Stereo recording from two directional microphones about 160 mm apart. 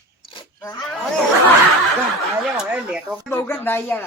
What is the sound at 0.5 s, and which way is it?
Speech, 20° left (ahead or behind).